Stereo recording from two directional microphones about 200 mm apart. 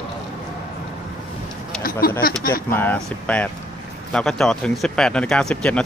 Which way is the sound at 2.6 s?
10° left (ahead or behind).